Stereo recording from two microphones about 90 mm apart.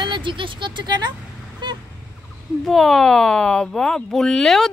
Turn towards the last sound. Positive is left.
turn(degrees=5)  # may be behind; listen again after turning